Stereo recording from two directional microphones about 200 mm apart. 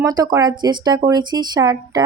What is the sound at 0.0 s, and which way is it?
Speech, 20° right (ahead or behind).